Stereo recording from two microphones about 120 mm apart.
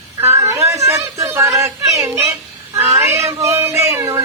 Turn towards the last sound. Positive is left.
turn(degrees=-20)  # may be behind; listen again after turning